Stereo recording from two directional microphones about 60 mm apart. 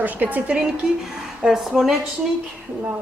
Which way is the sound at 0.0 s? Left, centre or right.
Right.